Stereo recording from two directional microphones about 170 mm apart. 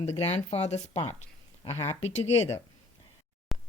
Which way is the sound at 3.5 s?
Centre (ahead or behind).